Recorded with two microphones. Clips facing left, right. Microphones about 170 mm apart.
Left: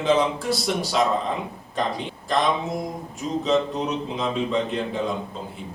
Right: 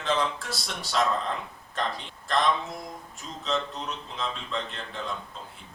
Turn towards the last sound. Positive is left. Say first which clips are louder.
# left 10 dB
turn(degrees=0)  # may be behind; listen again after turning